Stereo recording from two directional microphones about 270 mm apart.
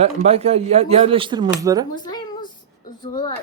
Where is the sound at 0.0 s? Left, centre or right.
Right.